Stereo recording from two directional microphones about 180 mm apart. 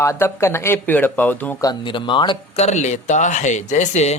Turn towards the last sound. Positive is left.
turn(degrees=40)  # may be behind; listen again after turning